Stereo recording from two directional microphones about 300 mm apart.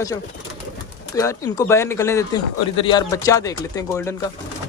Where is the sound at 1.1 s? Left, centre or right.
Centre.